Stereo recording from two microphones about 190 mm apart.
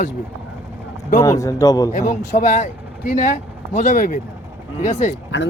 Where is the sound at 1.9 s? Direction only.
40° left (ahead or behind).